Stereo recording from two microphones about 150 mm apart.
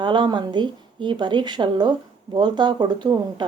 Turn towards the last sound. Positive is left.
turn(degrees=-30)  # may be behind; listen again after turning